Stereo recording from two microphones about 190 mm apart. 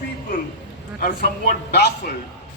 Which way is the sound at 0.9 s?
55° left (ahead or behind).